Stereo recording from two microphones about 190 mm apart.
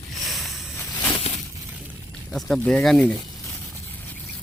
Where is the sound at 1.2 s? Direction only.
35° left (ahead or behind).